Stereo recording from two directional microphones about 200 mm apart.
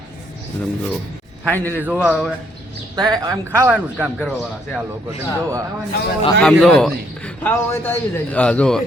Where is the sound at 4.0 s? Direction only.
5° right (ahead or behind).